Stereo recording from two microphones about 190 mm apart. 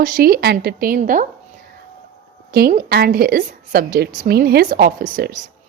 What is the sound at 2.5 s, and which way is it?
Speech, 50° right (ahead or behind).